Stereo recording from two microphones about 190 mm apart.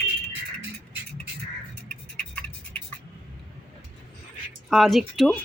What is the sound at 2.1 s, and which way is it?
Music, 5° left (ahead or behind).